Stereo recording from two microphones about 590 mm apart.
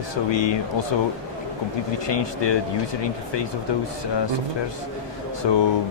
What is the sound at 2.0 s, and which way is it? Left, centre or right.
Speech, left.